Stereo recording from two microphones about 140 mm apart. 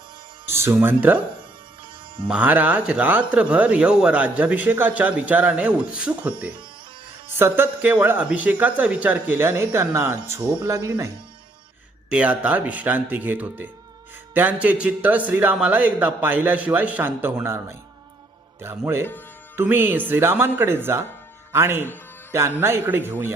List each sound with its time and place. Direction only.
0.4 s speech: 15° right (ahead or behind)
2.2 s speech: 10° right (ahead or behind)
12.0 s speech: 10° right (ahead or behind)
19.5 s speech: 15° right (ahead or behind)